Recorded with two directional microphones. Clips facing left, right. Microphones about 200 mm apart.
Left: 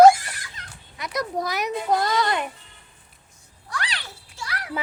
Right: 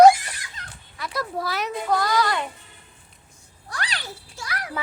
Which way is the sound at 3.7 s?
40° right (ahead or behind).